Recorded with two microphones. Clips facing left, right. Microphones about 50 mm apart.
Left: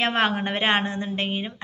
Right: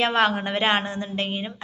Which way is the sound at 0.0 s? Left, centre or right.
Left.